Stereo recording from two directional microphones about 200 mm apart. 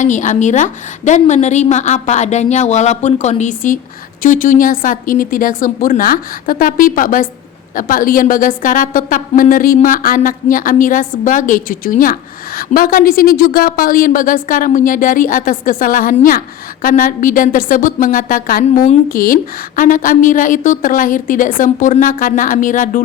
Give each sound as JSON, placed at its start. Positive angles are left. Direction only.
{"t": 0.0, "sound": "a woman's voice", "side_deg": 40}